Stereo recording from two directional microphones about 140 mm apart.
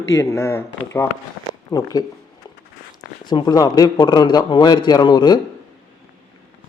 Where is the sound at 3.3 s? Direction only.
30° left (ahead or behind).